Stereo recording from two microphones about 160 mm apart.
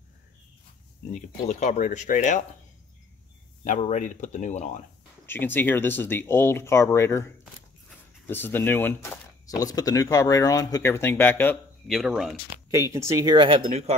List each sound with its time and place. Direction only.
1.1 s speech: 45° left (ahead or behind)
3.6 s speech: 50° left (ahead or behind)
5.2 s speech: 15° left (ahead or behind)
9.6 s speech: 25° left (ahead or behind)
11.9 s speech: centre (ahead or behind)
12.7 s speech: 15° right (ahead or behind)
13.6 s speech: 45° right (ahead or behind)